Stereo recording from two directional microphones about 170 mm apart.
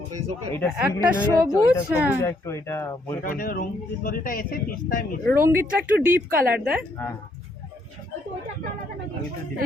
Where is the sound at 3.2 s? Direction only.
60° left (ahead or behind).